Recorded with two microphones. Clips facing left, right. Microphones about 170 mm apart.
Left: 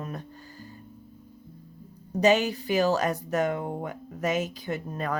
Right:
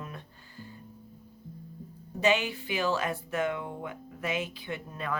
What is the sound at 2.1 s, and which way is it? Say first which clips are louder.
Speech: left 5 dB; 40° left (ahead or behind).